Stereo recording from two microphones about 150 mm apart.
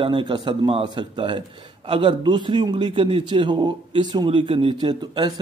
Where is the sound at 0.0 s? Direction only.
35° right (ahead or behind).